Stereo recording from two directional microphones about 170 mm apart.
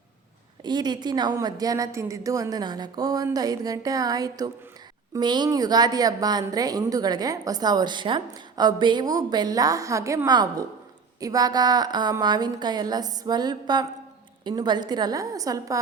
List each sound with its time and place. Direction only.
0.6 s a woman's voice: 25° right (ahead or behind)